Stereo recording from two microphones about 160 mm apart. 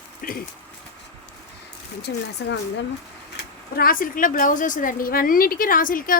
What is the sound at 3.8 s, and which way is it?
A woman's voice, 60° left (ahead or behind).